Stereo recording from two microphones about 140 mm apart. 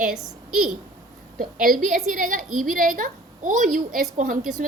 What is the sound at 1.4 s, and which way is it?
A woman's voice, 90° right.